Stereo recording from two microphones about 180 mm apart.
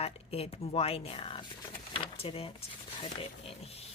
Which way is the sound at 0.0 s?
35° left (ahead or behind).